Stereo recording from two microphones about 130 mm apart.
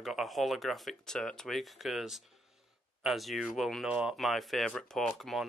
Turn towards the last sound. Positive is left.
turn(degrees=0)  # may be behind; listen again after turning